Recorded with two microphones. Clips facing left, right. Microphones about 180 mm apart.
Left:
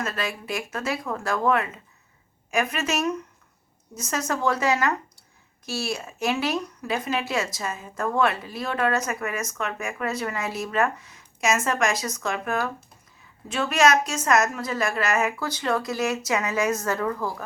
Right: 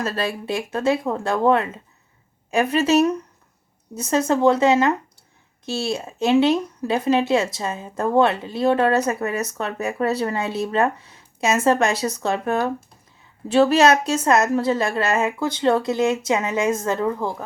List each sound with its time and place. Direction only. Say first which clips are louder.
0.0 s a woman's voice: right 5 dB; 30° right (ahead or behind)